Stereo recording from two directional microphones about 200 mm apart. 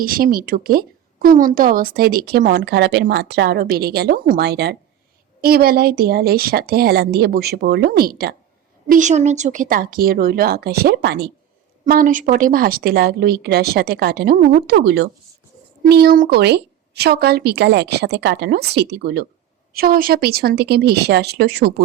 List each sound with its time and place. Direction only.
0.0 s a woman's voice: 45° right (ahead or behind)
8.9 s a woman's voice: 35° right (ahead or behind); by 11.3 s 55° right (ahead or behind)
11.9 s a woman's voice: 45° right (ahead or behind)